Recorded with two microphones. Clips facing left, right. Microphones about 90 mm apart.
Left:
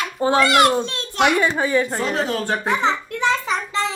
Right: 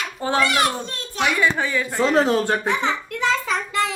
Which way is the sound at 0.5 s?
75° left (ahead or behind).